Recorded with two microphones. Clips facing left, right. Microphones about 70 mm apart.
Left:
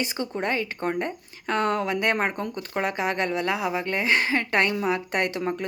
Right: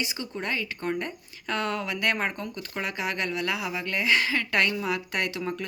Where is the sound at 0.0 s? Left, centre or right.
Left.